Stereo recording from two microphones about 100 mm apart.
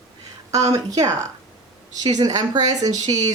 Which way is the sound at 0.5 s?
35° right (ahead or behind).